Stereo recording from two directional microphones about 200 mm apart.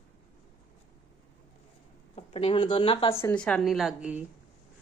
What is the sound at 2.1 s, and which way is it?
Speech, 25° left (ahead or behind).